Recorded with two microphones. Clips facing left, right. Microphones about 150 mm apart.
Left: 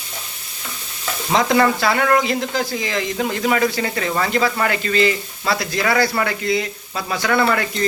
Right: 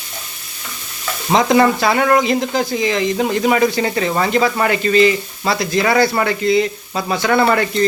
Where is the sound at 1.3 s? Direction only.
20° right (ahead or behind).